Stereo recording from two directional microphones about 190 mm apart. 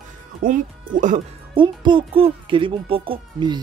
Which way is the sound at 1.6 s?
25° right (ahead or behind).